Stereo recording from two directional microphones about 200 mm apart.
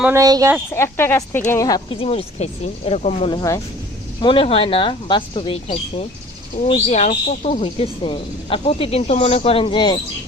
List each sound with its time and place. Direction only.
0.0 s speech: 15° right (ahead or behind)
0.7 s speech: 10° left (ahead or behind); by 3.2 s 35° left (ahead or behind)
3.2 s speech: 20° left (ahead or behind)